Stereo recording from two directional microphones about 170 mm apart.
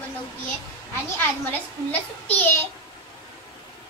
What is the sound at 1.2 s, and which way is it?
A child's voice, 10° left (ahead or behind).